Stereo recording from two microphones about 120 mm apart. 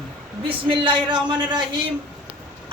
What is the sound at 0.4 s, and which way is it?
Speech, 45° right (ahead or behind).